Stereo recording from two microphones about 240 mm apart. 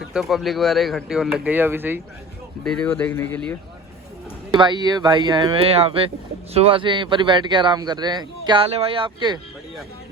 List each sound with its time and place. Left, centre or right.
0.0 s speech: centre
2.6 s speech: centre
4.5 s a man's voice: centre